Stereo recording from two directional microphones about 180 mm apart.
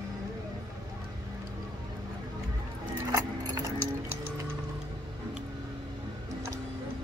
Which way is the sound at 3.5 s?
20° right (ahead or behind).